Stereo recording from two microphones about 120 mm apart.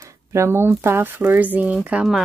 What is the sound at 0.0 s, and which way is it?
Speech, 25° right (ahead or behind).